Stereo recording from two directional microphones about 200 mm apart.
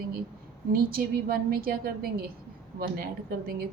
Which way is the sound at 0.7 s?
45° right (ahead or behind).